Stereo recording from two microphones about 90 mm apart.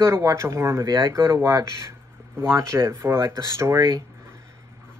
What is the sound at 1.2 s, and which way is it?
Speech, 30° right (ahead or behind).